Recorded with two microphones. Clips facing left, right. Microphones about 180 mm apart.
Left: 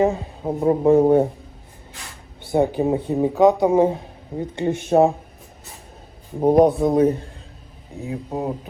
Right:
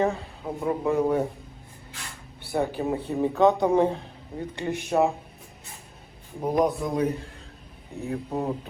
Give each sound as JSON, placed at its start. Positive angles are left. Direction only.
{"t": 0.0, "sound": "speech", "side_deg": 15}
{"t": 0.4, "sound": "speech", "side_deg": 35}
{"t": 2.4, "sound": "speech", "side_deg": 20}
{"t": 4.9, "sound": "speech", "side_deg": 35}
{"t": 6.4, "sound": "speech", "side_deg": 30}
{"t": 7.9, "sound": "speech", "side_deg": 15}